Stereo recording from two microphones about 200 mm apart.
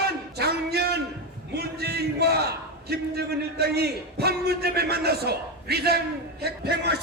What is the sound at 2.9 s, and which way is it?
A man's voice, 55° right (ahead or behind).